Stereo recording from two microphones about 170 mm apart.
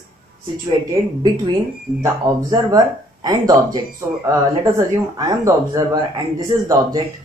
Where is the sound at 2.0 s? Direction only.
20° right (ahead or behind).